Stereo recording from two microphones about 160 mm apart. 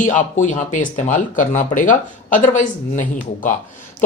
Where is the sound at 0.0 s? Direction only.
55° left (ahead or behind).